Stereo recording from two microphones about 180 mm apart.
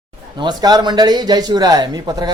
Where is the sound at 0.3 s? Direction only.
20° right (ahead or behind).